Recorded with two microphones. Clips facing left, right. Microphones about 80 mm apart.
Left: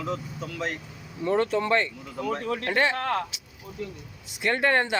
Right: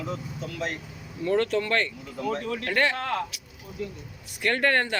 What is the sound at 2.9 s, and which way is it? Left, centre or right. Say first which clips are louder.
Speech: left 2 dB; left.